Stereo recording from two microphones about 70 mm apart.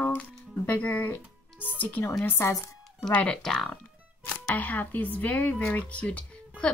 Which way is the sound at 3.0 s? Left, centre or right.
Centre.